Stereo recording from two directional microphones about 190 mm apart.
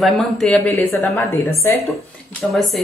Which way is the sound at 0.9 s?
15° left (ahead or behind).